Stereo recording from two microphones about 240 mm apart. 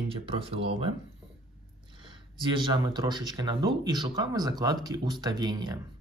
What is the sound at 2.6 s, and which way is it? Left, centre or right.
Speech, centre.